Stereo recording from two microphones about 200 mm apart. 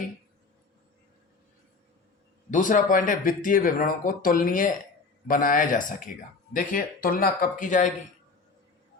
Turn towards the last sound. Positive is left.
turn(degrees=40)  # may be behind; listen again after turning